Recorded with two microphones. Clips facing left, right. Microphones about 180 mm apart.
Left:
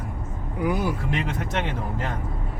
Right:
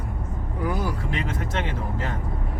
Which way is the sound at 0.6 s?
20° left (ahead or behind).